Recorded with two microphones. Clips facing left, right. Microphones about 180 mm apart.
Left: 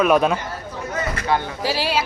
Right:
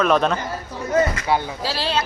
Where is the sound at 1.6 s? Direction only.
15° left (ahead or behind).